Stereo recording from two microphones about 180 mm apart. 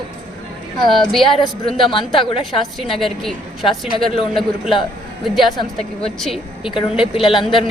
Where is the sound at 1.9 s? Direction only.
30° left (ahead or behind).